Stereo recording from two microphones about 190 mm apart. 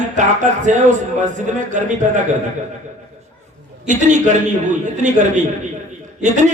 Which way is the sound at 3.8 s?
40° right (ahead or behind).